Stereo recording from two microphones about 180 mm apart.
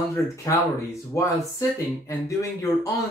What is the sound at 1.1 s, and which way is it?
Speech, 15° left (ahead or behind).